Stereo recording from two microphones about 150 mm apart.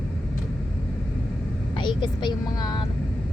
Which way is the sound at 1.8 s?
30° left (ahead or behind).